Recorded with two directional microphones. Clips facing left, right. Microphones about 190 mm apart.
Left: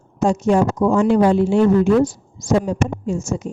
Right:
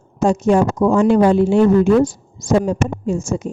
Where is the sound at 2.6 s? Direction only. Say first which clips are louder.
Right 2 dB; 60° right (ahead or behind).